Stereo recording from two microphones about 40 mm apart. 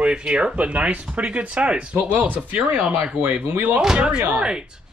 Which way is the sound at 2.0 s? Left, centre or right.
Right.